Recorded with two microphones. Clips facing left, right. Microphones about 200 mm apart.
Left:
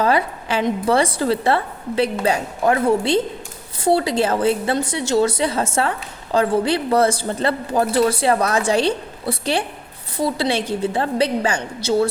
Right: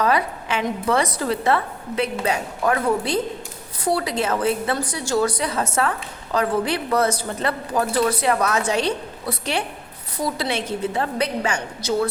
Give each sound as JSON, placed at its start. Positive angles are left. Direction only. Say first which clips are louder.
{"t": 0.0, "sound": "a woman's voice", "louder": "left 2 dB", "side_deg": 30}